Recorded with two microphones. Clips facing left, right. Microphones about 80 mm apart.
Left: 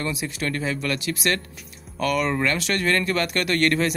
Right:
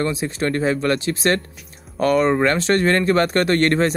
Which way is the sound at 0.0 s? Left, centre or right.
Right.